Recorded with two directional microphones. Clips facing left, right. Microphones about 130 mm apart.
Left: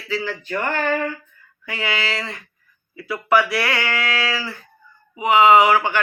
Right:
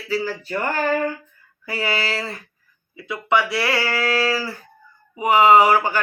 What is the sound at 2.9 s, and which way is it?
A woman's voice, 20° right (ahead or behind).